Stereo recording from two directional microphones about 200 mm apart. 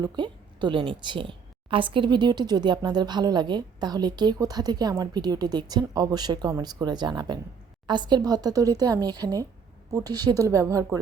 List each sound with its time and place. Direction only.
0.0 s a woman's voice: 25° right (ahead or behind)